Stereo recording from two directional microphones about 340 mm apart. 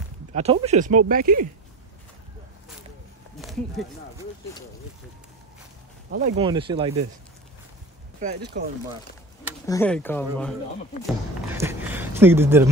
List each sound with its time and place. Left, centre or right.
0.3 s speech: centre
3.3 s a sound: centre
6.1 s speech: centre
8.2 s speech: right
9.7 s speech: centre
11.4 s a sound: centre